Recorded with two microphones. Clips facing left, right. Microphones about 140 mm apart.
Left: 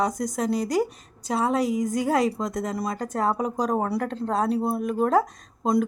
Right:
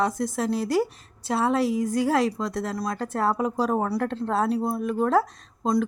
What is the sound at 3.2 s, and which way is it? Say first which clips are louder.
Speech: right 1 dB; centre (ahead or behind).